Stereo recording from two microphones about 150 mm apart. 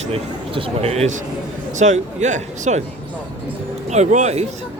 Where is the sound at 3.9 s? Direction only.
50° right (ahead or behind).